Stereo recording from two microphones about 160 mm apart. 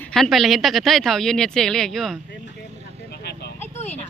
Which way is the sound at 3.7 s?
45° left (ahead or behind).